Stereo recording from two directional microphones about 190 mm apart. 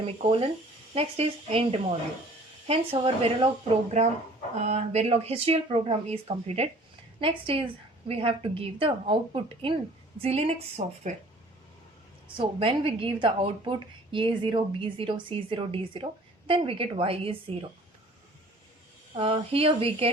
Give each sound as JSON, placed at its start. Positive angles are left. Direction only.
{"t": 0.0, "sound": "a woman's voice", "side_deg": -30}
{"t": 4.6, "sound": "a woman's voice", "side_deg": -35}
{"t": 12.4, "sound": "a woman's voice", "side_deg": -30}
{"t": 19.1, "sound": "a woman's voice", "side_deg": -30}